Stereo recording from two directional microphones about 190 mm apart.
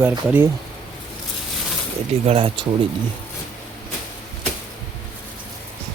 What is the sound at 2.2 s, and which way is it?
Speech, 30° right (ahead or behind).